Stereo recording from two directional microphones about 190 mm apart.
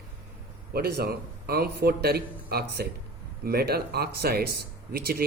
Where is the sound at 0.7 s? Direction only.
55° right (ahead or behind).